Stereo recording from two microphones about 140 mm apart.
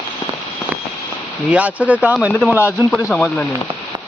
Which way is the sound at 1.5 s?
10° right (ahead or behind).